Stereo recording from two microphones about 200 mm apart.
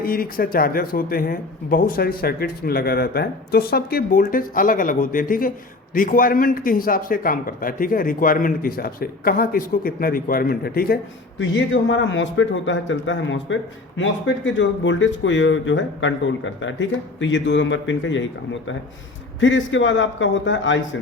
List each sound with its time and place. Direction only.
0.0 s a man's voice: 45° left (ahead or behind); by 18.2 s 70° left (ahead or behind)
19.4 s a man's voice: 70° left (ahead or behind)